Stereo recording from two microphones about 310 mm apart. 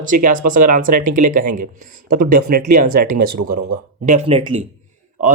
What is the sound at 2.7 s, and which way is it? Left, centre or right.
Speech, right.